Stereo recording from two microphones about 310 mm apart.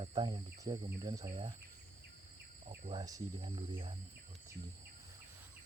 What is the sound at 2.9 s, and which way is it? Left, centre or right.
Speech, centre.